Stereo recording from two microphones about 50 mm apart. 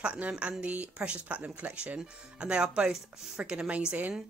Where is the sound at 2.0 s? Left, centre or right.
Centre.